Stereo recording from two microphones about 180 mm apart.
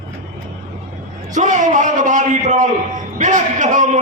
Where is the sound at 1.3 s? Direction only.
45° right (ahead or behind).